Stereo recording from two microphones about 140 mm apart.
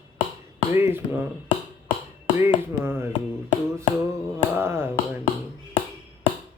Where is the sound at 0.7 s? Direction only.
15° right (ahead or behind).